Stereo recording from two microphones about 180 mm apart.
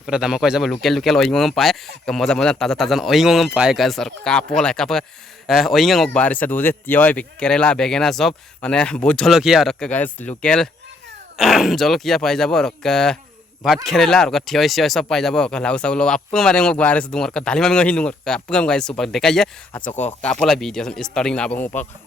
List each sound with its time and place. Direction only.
0.0 s speech: 5° right (ahead or behind)
19.8 s speech: 40° left (ahead or behind)
20.2 s speech: 5° left (ahead or behind)